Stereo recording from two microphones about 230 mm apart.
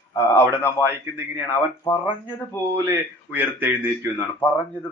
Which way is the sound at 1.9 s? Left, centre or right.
Centre.